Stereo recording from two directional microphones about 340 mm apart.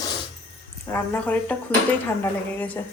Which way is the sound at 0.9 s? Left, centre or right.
Centre.